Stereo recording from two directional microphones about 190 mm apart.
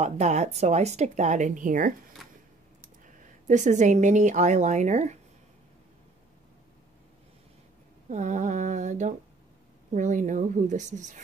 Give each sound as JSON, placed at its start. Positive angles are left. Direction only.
{"t": 0.0, "sound": "speech", "side_deg": -35}
{"t": 3.4, "sound": "speech", "side_deg": -40}
{"t": 8.1, "sound": "speech", "side_deg": -40}